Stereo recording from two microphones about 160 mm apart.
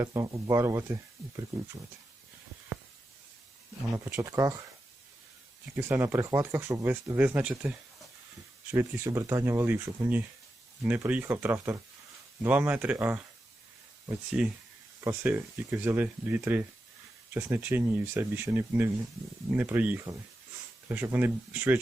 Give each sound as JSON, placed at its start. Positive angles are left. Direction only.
{"t": 0.0, "sound": "speech", "side_deg": -20}
{"t": 3.9, "sound": "speech", "side_deg": -15}
{"t": 5.7, "sound": "speech", "side_deg": -15}
{"t": 8.7, "sound": "speech", "side_deg": -15}
{"t": 14.4, "sound": "speech", "side_deg": -5}